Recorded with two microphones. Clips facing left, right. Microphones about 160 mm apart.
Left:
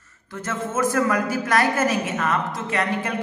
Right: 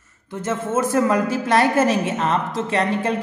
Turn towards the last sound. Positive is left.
turn(degrees=-30)  # may be behind; listen again after turning